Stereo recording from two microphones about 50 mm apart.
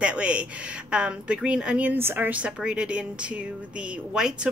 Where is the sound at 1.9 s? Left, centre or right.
Right.